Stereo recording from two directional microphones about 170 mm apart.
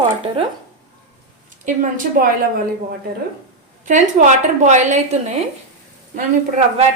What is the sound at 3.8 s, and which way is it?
A woman's voice, 45° right (ahead or behind).